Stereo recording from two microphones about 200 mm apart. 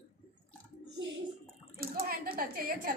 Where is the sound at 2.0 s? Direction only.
45° right (ahead or behind).